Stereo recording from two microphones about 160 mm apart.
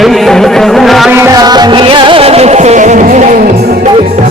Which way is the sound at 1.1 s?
20° right (ahead or behind).